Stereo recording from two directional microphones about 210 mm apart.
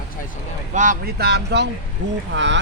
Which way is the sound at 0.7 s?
35° right (ahead or behind).